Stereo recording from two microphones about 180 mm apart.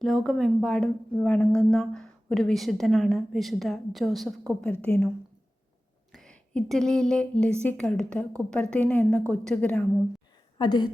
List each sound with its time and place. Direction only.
0.0 s a woman's voice: centre (ahead or behind)
10.6 s a woman's voice: 25° left (ahead or behind)